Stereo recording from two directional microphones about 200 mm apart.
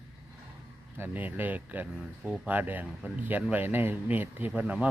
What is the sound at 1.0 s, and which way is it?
Speech, 10° right (ahead or behind).